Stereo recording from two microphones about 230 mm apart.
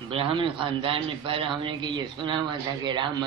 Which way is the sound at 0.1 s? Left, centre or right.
Right.